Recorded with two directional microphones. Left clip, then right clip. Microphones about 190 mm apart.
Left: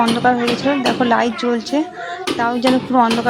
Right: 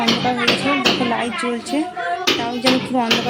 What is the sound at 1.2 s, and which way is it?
Speech, centre (ahead or behind).